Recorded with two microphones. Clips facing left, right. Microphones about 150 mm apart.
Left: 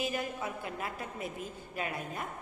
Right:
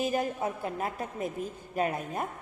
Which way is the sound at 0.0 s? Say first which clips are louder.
Right 6 dB; 40° right (ahead or behind).